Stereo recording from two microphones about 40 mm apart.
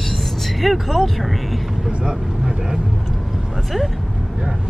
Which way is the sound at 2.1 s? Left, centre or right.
Centre.